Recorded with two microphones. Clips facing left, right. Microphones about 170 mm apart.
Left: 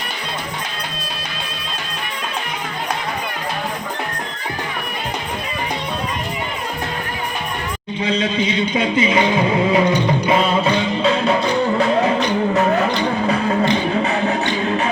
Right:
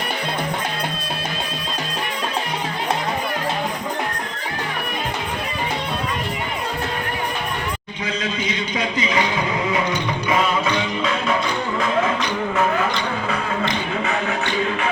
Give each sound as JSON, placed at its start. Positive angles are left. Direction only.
{"t": 8.0, "sound": "a man's voice", "side_deg": 30}
{"t": 8.8, "sound": "a sound", "side_deg": 25}
{"t": 10.2, "sound": "music", "side_deg": 30}